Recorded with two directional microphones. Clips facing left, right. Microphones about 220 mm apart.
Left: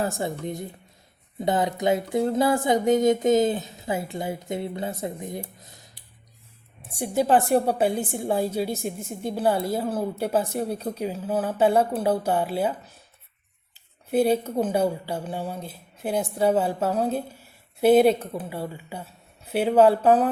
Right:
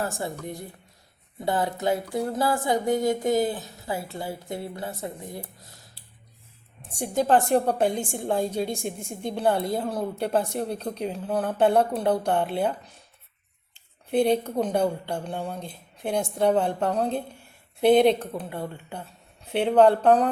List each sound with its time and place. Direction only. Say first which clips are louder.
0.0 s a sound: left 3 dB; 20° left (ahead or behind)
7.0 s a woman's voice: left 1 dB; 10° left (ahead or behind)
14.1 s a woman's voice: left 1 dB; 5° left (ahead or behind)